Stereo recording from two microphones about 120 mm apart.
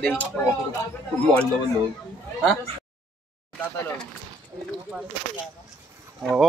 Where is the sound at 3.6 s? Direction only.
15° left (ahead or behind).